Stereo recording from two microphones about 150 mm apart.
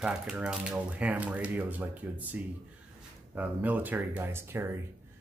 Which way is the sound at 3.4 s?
10° right (ahead or behind).